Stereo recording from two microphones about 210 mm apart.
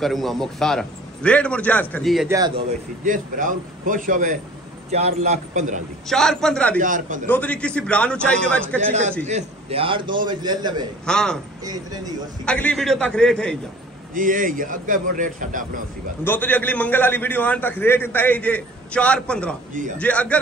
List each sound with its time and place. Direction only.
0.0 s a man's voice: centre (ahead or behind)
2.2 s speech: 15° right (ahead or behind)
3.1 s a man's voice: 40° right (ahead or behind)
6.0 s a man's voice: centre (ahead or behind)
6.8 s a man's voice: 40° right (ahead or behind)
7.2 s a man's voice: 5° left (ahead or behind)
9.3 s a man's voice: 25° right (ahead or behind)
11.1 s a man's voice: 5° left (ahead or behind)
11.6 s speech: 15° right (ahead or behind)
12.4 s a man's voice: 5° left (ahead or behind)
14.1 s a man's voice: 40° right (ahead or behind)
16.3 s a man's voice: 10° left (ahead or behind)